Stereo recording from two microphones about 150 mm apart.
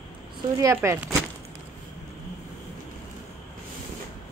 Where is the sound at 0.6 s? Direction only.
20° right (ahead or behind).